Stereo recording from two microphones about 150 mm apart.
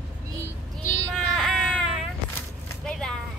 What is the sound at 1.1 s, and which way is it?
Vehicle, centre (ahead or behind).